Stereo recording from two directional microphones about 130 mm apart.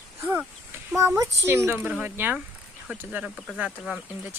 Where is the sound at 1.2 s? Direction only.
20° right (ahead or behind).